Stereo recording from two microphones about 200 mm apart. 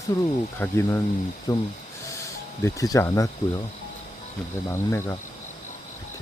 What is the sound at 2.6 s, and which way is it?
Speech, 15° left (ahead or behind).